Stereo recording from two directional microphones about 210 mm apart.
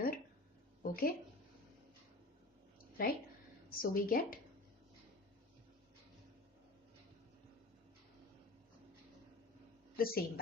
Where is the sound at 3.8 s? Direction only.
45° left (ahead or behind).